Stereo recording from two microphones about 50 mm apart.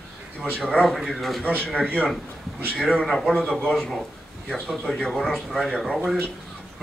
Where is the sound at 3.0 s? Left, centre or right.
Centre.